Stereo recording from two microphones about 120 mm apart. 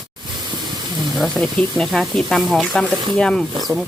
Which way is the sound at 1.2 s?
5° left (ahead or behind).